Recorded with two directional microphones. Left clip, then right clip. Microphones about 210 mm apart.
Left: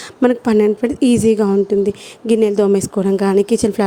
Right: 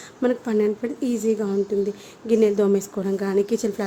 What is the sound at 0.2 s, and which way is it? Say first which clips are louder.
A woman's voice: left 8 dB; 40° left (ahead or behind).